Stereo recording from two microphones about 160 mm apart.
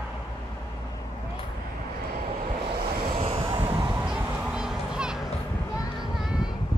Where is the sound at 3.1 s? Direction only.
35° right (ahead or behind).